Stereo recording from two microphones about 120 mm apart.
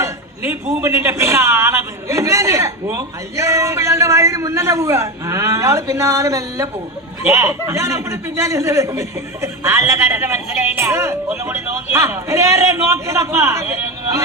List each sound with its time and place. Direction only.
0.8 s a man's voice: 25° right (ahead or behind)